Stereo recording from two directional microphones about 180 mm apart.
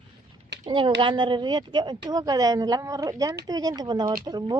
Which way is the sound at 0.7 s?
30° right (ahead or behind).